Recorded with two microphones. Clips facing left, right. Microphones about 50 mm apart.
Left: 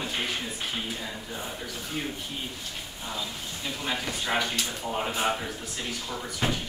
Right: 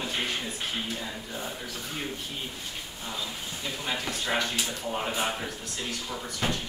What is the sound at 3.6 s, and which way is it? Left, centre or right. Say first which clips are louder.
Speech: left 1 dB; centre.